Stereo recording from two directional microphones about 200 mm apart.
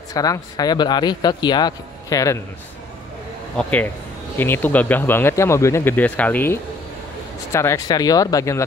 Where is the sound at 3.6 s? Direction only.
5° left (ahead or behind).